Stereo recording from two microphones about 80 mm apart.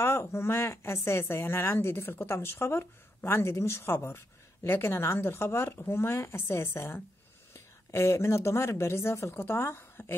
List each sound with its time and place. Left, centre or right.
0.0 s a woman's voice: left